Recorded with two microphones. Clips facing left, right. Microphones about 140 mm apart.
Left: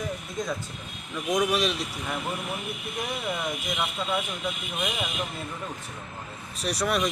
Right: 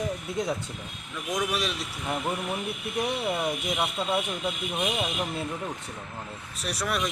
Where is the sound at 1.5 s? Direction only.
Centre (ahead or behind).